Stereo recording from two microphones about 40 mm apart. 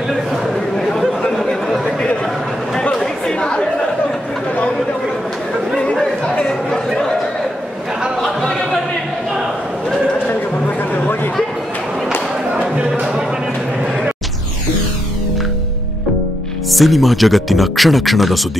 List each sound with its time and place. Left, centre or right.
0.7 s chatter: centre
2.9 s chatter: centre
8.2 s a sound: centre
16.7 s speech: centre